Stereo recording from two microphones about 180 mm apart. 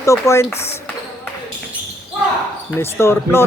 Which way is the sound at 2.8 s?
15° left (ahead or behind).